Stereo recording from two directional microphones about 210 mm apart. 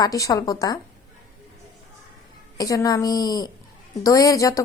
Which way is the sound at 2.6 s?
15° left (ahead or behind).